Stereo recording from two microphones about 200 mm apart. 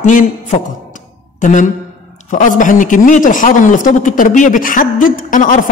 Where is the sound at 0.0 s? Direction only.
40° left (ahead or behind).